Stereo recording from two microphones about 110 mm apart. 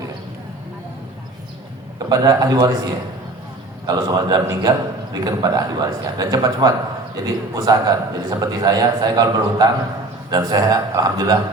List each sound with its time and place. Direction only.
2.0 s a man's voice: 35° right (ahead or behind)